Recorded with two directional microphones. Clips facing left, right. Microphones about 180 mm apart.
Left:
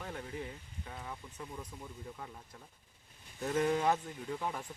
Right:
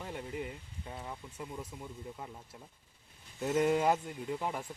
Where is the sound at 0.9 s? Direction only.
20° right (ahead or behind).